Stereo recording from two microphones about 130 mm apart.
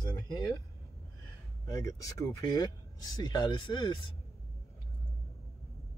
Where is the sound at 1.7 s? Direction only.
25° left (ahead or behind).